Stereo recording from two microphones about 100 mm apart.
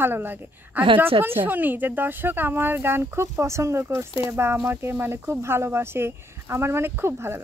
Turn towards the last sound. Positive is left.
turn(degrees=-25)  # may be behind; listen again after turning